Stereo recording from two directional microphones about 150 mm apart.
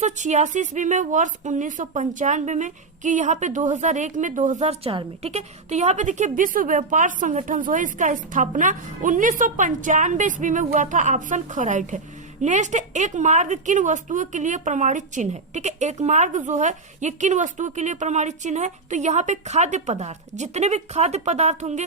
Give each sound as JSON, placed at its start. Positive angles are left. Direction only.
{"t": 0.0, "sound": "a woman's voice", "side_deg": -50}